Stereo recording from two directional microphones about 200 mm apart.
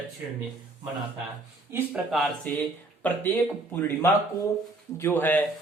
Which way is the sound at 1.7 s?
5° right (ahead or behind).